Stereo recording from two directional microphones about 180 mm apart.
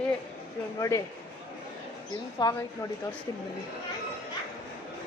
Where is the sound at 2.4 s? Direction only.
25° left (ahead or behind).